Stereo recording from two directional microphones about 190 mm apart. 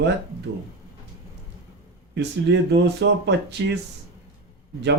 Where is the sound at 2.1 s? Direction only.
65° right (ahead or behind).